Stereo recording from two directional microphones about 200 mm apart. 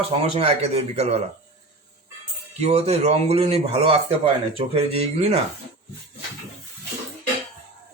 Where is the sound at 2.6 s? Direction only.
30° right (ahead or behind).